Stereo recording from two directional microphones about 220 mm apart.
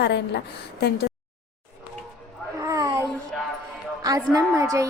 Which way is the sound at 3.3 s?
Centre (ahead or behind).